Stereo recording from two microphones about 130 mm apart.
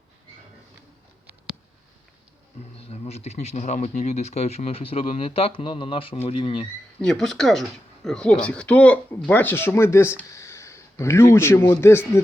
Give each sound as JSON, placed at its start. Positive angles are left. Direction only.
{"t": 2.9, "sound": "speech", "side_deg": 55}
{"t": 7.0, "sound": "speech", "side_deg": 5}